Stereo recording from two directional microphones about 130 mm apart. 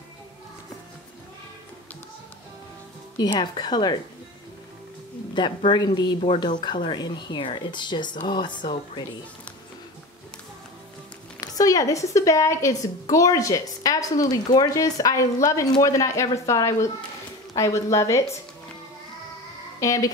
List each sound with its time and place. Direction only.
3.2 s speech: 35° left (ahead or behind)
5.3 s speech: 35° left (ahead or behind)
11.4 s a woman's voice: 30° left (ahead or behind)
19.8 s a woman's voice: 25° left (ahead or behind)